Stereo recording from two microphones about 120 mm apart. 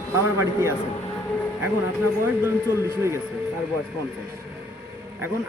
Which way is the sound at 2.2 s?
20° right (ahead or behind).